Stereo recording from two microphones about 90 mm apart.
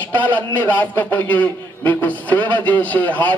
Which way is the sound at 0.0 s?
15° left (ahead or behind).